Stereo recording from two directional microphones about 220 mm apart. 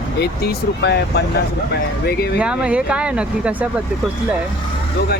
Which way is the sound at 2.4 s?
5° right (ahead or behind).